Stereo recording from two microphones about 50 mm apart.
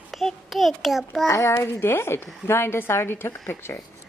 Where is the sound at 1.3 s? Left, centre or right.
Left.